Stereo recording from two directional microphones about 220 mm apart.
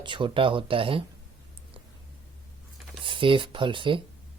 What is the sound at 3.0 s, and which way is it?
Speech, 20° right (ahead or behind).